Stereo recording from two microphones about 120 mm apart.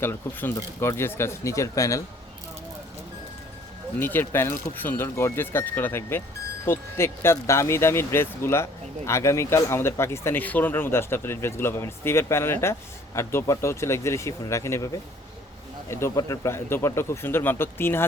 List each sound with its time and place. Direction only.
0.0 s speech: 15° left (ahead or behind)
4.0 s speech: 20° left (ahead or behind)
15.9 s speech: 20° left (ahead or behind)